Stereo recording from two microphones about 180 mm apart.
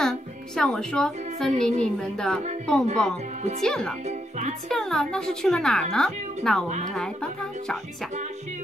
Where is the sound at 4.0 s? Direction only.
40° right (ahead or behind).